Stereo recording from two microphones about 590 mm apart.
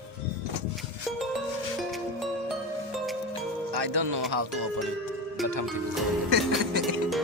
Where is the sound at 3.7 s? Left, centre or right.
Right.